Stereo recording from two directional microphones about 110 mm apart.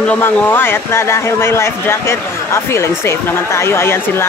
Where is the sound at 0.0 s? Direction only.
15° left (ahead or behind).